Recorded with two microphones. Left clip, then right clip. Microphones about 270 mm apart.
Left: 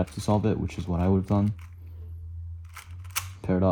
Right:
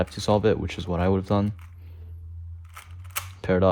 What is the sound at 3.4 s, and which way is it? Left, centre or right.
Speech, left.